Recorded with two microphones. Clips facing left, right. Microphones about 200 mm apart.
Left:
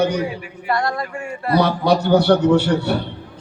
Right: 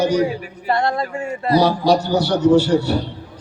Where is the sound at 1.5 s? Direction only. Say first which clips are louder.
Right 1 dB; 60° left (ahead or behind).